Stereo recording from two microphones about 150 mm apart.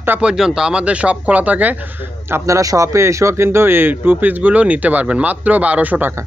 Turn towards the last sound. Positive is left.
turn(degrees=-10)  # may be behind; listen again after turning